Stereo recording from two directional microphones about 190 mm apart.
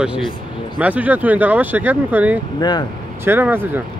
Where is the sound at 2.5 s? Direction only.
20° left (ahead or behind).